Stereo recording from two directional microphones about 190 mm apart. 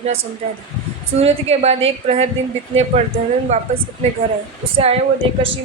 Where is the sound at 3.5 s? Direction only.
35° right (ahead or behind).